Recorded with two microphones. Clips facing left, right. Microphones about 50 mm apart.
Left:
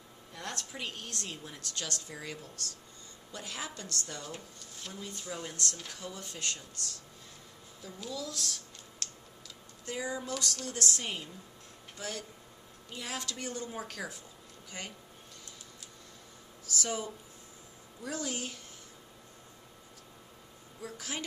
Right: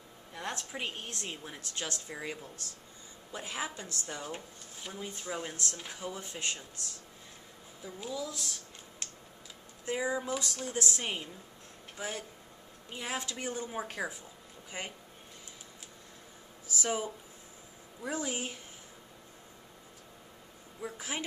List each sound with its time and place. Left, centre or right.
0.3 s speech: centre
5.1 s speech: right
7.8 s speech: centre
9.0 s typing: centre
9.8 s speech: centre
16.7 s speech: centre
20.8 s speech: centre